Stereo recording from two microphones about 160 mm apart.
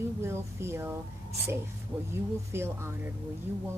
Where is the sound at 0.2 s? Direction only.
15° right (ahead or behind).